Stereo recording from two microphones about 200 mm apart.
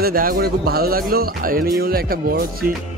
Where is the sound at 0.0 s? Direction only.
45° right (ahead or behind).